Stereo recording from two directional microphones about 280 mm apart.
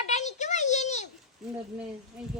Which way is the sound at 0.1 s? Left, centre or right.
Left.